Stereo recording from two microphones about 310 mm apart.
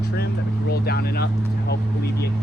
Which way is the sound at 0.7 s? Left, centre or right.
Left.